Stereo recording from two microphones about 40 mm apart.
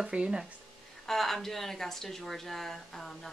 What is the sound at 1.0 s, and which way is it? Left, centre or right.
Speech, centre.